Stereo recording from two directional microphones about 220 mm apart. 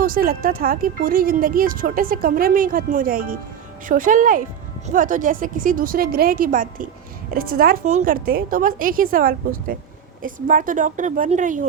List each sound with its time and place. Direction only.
0.0 s speech: 40° right (ahead or behind)